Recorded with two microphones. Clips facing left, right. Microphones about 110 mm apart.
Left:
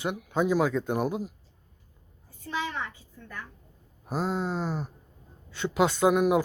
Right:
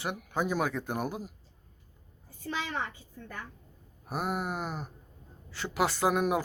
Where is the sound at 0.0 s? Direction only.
20° left (ahead or behind).